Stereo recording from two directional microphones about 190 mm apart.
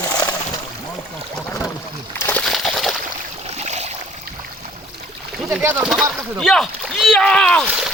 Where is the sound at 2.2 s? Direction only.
5° left (ahead or behind).